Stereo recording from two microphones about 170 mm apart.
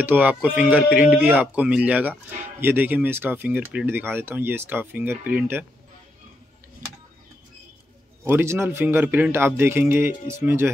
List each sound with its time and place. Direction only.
0.0 s speech: 10° right (ahead or behind)
8.2 s speech: 15° right (ahead or behind)